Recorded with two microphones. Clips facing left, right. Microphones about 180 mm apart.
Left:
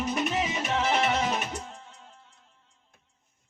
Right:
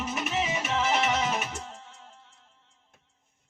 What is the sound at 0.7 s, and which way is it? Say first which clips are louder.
Music: left 1 dB; 35° left (ahead or behind).